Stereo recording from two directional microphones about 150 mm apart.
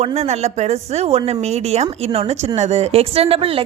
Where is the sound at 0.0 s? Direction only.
45° right (ahead or behind).